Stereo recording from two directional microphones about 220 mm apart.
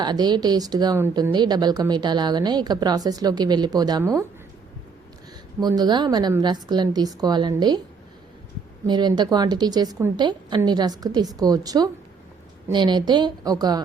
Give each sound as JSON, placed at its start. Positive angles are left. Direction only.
{"t": 0.0, "sound": "speech", "side_deg": -20}
{"t": 5.5, "sound": "speech", "side_deg": -20}
{"t": 8.9, "sound": "a woman's voice", "side_deg": -20}